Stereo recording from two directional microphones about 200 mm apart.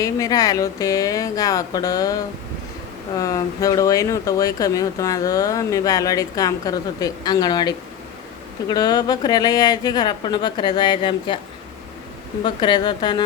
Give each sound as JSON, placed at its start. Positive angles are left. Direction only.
{"t": 0.0, "sound": "speech", "side_deg": 15}
{"t": 12.4, "sound": "speech", "side_deg": 20}